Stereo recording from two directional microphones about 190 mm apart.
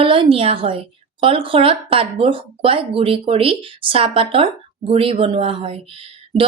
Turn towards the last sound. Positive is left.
turn(degrees=-30)  # may be behind; listen again after turning